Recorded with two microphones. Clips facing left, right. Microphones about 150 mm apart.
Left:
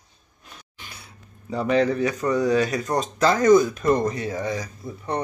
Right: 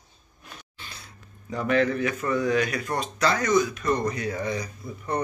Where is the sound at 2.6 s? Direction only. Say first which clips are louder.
Left 4 dB; 35° left (ahead or behind).